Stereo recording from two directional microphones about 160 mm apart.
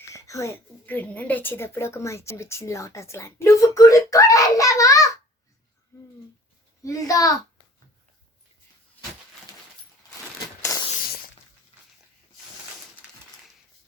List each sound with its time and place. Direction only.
0.1 s a woman's voice: 20° left (ahead or behind)
6.8 s a child's voice: 20° left (ahead or behind)
10.6 s a sound: 20° left (ahead or behind)